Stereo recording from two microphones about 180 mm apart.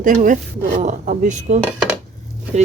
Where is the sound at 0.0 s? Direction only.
45° right (ahead or behind).